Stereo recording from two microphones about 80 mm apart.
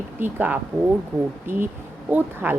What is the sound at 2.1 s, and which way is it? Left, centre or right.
Speech, right.